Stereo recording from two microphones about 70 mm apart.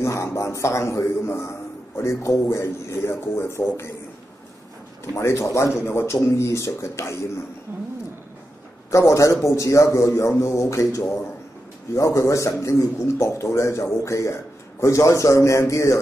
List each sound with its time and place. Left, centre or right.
0.0 s a man's voice: left
5.0 s a man's voice: left
8.9 s a man's voice: left